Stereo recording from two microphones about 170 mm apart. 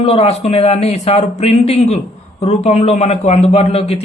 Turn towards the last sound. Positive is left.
turn(degrees=35)  # may be behind; listen again after turning